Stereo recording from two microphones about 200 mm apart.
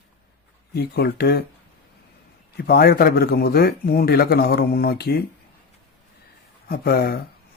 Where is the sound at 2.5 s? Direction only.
50° left (ahead or behind).